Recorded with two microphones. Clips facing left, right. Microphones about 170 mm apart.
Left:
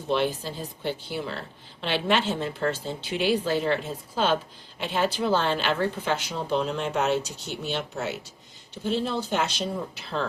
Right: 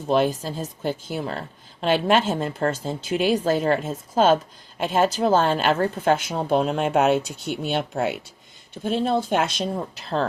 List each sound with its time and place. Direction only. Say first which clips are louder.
0.1 s a woman's voice: right 5 dB; 45° right (ahead or behind)
9.9 s speech: right 5 dB; 40° right (ahead or behind)